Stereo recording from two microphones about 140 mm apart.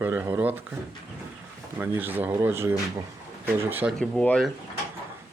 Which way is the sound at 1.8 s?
15° right (ahead or behind).